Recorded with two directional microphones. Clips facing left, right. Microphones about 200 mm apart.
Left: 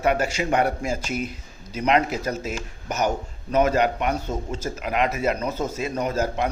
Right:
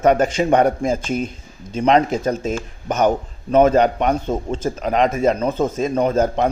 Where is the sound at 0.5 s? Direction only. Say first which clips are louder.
Right 6 dB; 35° right (ahead or behind).